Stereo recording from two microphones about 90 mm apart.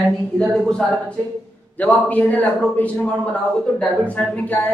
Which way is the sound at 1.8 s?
15° left (ahead or behind).